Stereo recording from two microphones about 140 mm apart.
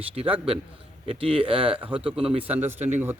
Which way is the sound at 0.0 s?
45° right (ahead or behind).